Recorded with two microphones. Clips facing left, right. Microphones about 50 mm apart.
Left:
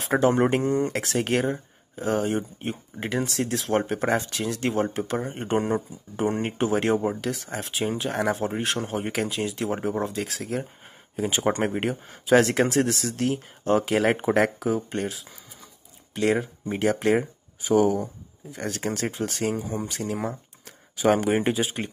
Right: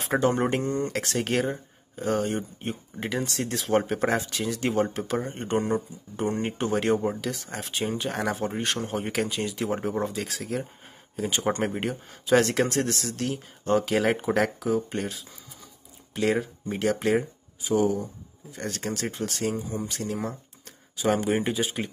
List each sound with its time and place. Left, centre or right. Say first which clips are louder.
0.0 s speech: left 3 dB; centre
1.0 s speech: left 2 dB; centre
11.1 s speech: left 2 dB; centre
14.7 s speech: even; centre
16.6 s speech: left 2 dB; centre
17.6 s speech: left 3 dB; left
18.6 s speech: left 3 dB; centre
19.5 s speech: left 2 dB; left
20.1 s speech: left 2 dB; centre
20.9 s speech: left 3 dB; left